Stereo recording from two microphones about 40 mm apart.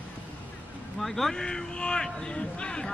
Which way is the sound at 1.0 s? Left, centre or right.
Centre.